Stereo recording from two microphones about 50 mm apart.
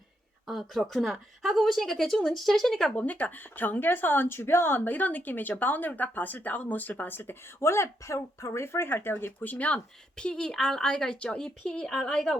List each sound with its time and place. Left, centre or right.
0.4 s speech: centre
2.9 s speech: left
4.9 s speech: left
9.5 s speech: left
9.7 s speech: centre